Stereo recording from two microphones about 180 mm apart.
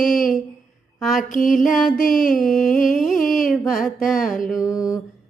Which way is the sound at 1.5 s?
Centre (ahead or behind).